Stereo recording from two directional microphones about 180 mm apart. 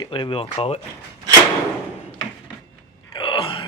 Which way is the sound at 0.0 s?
25° left (ahead or behind).